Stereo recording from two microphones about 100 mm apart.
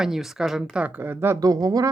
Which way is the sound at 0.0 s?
5° right (ahead or behind).